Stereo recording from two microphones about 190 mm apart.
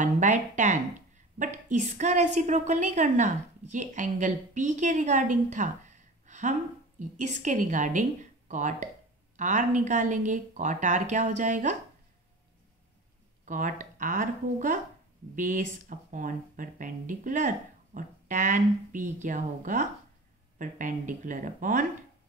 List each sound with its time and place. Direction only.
0.0 s a woman's voice: 40° right (ahead or behind)
13.5 s speech: 45° right (ahead or behind)